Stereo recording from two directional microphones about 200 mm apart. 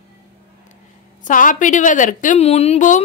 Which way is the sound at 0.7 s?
40° left (ahead or behind).